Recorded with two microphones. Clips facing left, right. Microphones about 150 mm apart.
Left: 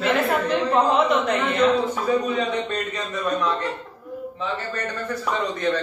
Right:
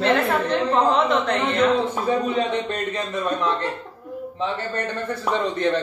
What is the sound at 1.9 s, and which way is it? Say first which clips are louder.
A man's voice: even; 30° right (ahead or behind).